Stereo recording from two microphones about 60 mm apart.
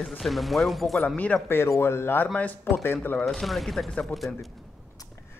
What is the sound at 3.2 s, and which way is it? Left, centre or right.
Speech, centre.